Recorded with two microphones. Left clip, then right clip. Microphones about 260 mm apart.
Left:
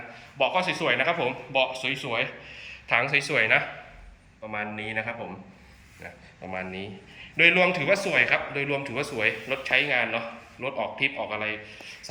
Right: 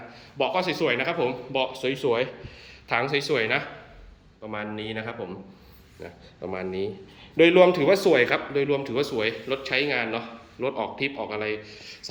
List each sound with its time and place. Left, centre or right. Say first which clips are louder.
0.3 s a man's voice: even; centre
6.5 s a man's voice: right 4 dB; centre